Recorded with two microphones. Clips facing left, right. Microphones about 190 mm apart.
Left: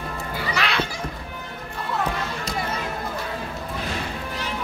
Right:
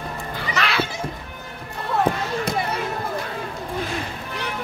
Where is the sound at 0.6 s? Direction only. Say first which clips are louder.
Right 2 dB; centre (ahead or behind).